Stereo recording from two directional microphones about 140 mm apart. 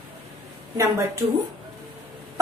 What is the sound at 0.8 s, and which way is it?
Speech, 25° right (ahead or behind).